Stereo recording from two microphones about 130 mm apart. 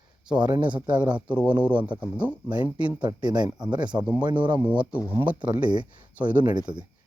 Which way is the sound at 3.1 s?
35° right (ahead or behind).